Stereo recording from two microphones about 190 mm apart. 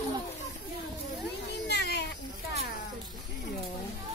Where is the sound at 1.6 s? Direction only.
60° left (ahead or behind).